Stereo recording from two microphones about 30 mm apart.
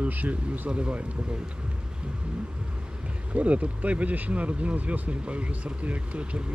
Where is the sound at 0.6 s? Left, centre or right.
Right.